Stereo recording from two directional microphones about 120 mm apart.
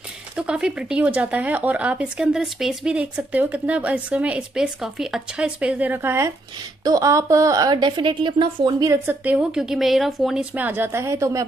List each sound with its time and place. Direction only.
0.4 s a woman's voice: 5° right (ahead or behind); by 8.8 s 40° right (ahead or behind)
8.8 s speech: 25° right (ahead or behind)
9.2 s speech: 10° right (ahead or behind)